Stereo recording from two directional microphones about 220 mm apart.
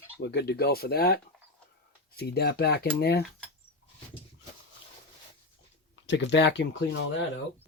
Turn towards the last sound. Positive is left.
turn(degrees=50)  # may be behind; listen again after turning